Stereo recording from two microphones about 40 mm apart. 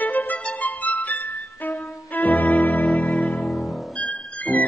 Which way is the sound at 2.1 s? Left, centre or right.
Left.